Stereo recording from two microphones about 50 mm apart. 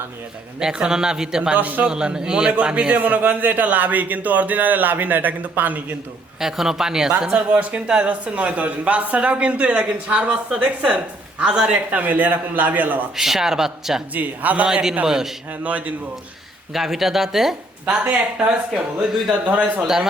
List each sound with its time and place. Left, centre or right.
0.6 s a man's voice: centre
1.5 s a man's voice: right
1.9 s a man's voice: centre; by 6.0 s right
6.4 s a man's voice: centre; by 13.0 s right
13.1 s a man's voice: centre
14.1 s a man's voice: right
14.7 s a man's voice: centre
16.7 s speech: centre
18.3 s a man's voice: right